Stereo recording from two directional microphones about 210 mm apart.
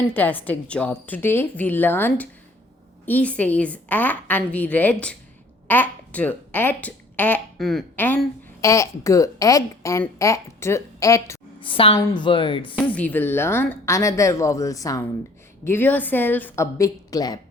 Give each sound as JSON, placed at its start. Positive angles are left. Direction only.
{"t": 0.1, "sound": "a woman's voice", "side_deg": 10}
{"t": 12.9, "sound": "a woman's voice", "side_deg": 5}